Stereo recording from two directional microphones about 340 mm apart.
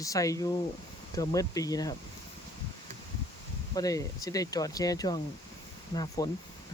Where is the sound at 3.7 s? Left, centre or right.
Centre.